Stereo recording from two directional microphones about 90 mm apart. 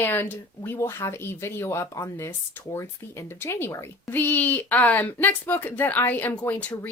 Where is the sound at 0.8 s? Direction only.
30° left (ahead or behind).